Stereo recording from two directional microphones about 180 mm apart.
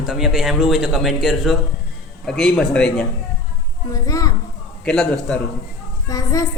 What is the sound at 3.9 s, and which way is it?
Speech, 20° left (ahead or behind).